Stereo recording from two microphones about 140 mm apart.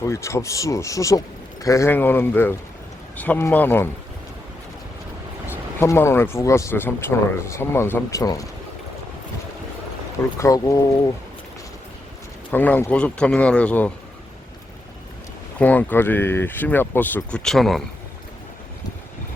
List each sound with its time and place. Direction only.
0.0 s speech: 20° left (ahead or behind)
5.8 s speech: 20° left (ahead or behind)
10.3 s speech: 20° left (ahead or behind)
12.5 s speech: 15° left (ahead or behind)
15.5 s speech: 10° left (ahead or behind)